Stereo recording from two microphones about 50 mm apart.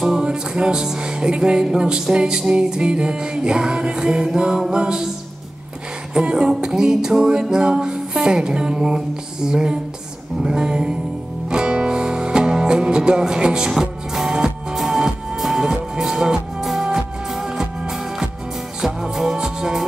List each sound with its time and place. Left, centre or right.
0.0 s music: centre
6.1 s music: centre